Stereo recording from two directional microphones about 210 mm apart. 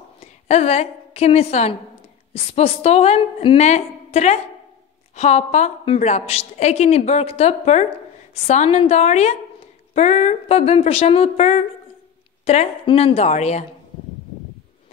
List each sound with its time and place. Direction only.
0.2 s a woman's voice: 30° left (ahead or behind)